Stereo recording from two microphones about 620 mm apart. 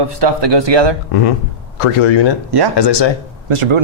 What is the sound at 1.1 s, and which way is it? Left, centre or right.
Speech, left.